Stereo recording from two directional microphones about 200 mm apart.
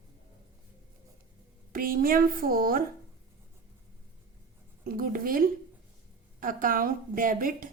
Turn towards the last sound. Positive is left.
turn(degrees=-45)  # may be behind; listen again after turning